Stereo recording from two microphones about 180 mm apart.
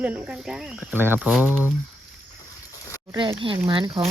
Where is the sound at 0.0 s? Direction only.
5° right (ahead or behind).